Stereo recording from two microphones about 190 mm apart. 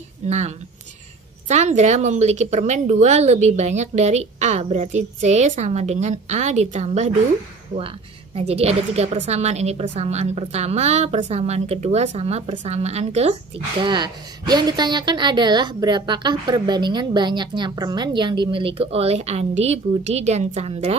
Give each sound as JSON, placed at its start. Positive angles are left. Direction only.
{"t": 1.5, "sound": "speech", "side_deg": -35}
{"t": 8.4, "sound": "speech", "side_deg": -35}
{"t": 13.8, "sound": "a woman's voice", "side_deg": -20}